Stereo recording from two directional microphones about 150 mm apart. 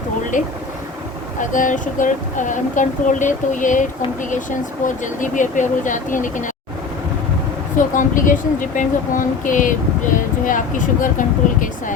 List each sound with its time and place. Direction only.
0.3 s speech: 60° left (ahead or behind)
7.8 s speech: 60° left (ahead or behind)